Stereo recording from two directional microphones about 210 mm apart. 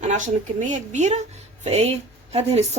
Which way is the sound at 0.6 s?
35° right (ahead or behind).